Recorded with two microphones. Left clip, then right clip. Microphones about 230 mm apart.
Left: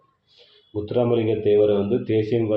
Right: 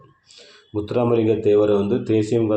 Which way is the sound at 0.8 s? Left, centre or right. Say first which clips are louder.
Right 2 dB; centre.